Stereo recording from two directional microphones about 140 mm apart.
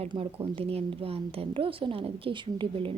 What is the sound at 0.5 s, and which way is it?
A woman's voice, 40° right (ahead or behind).